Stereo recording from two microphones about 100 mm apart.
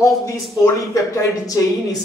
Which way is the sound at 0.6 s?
30° left (ahead or behind).